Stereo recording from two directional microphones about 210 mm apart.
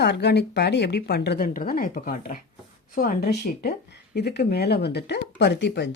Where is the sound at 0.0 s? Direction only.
50° left (ahead or behind).